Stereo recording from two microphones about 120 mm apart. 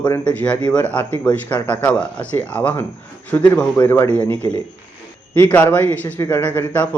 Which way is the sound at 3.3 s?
25° left (ahead or behind).